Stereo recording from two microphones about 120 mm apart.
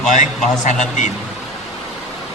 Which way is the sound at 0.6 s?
90° left.